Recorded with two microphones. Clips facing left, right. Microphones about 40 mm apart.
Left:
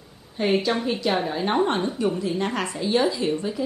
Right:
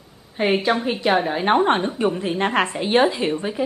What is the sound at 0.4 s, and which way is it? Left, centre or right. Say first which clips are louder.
A woman's voice: right 3 dB; right.